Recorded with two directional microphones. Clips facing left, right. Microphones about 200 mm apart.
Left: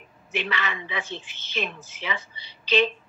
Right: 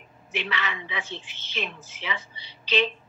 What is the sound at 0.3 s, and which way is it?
A woman's voice, 45° left (ahead or behind).